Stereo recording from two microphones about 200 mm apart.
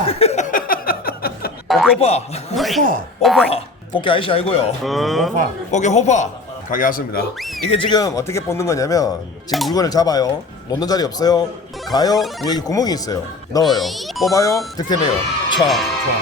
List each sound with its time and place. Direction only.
0.1 s chuckle: 30° left (ahead or behind); by 1.5 s 50° left (ahead or behind)
1.6 s a sound: centre (ahead or behind)
2.0 s speech: 30° left (ahead or behind)
2.6 s speech: centre (ahead or behind)
3.5 s speech: 25° left (ahead or behind)
4.9 s speech: centre (ahead or behind)
5.7 s speech: 35° left (ahead or behind)
7.3 s whistling: centre (ahead or behind)
7.7 s speech: 25° left (ahead or behind)
9.5 s speech: centre (ahead or behind)
9.7 s speech: 20° left (ahead or behind)
13.7 s speech: centre (ahead or behind)
14.3 s speech: 15° left (ahead or behind)
15.6 s speech: centre (ahead or behind)